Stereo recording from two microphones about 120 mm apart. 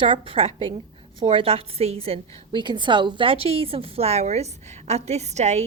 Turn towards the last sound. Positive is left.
turn(degrees=-70)  # may be behind; listen again after turning